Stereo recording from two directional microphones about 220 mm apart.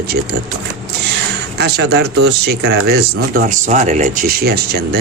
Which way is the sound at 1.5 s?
50° right (ahead or behind).